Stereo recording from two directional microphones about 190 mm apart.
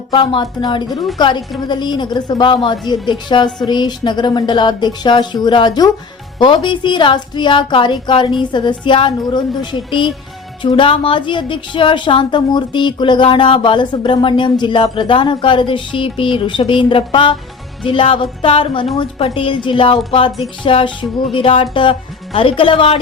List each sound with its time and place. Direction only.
0.1 s a woman's voice: 25° left (ahead or behind)